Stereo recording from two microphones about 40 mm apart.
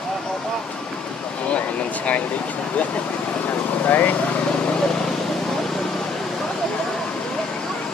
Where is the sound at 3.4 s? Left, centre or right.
Left.